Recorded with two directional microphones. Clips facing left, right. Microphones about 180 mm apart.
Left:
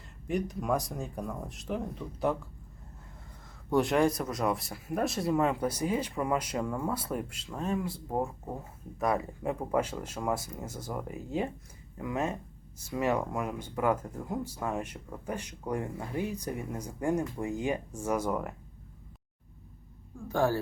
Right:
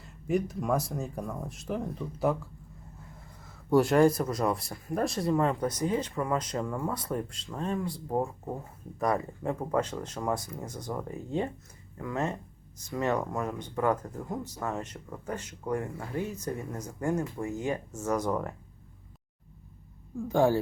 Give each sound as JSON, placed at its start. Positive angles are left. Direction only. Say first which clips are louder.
{"t": 0.0, "sound": "speech", "louder": "right 3 dB", "side_deg": -5}
{"t": 3.7, "sound": "speech", "louder": "right 4 dB", "side_deg": 0}
{"t": 9.5, "sound": "speech", "louder": "right 1 dB", "side_deg": 10}
{"t": 20.2, "sound": "speech", "louder": "right 4 dB", "side_deg": -15}